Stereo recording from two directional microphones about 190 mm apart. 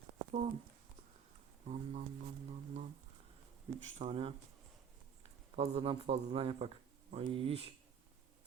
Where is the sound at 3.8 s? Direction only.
35° right (ahead or behind).